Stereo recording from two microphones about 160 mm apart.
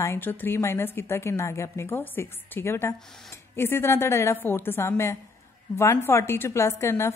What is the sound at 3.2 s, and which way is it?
A woman's voice, 15° left (ahead or behind).